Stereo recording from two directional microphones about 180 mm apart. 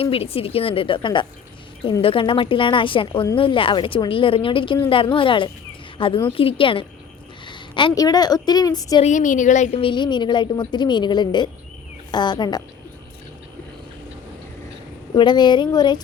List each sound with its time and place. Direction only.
0.0 s a woman's voice: 30° left (ahead or behind)
9.0 s a woman's voice: 40° left (ahead or behind); by 12.6 s 25° left (ahead or behind)
15.1 s a woman's voice: 25° left (ahead or behind)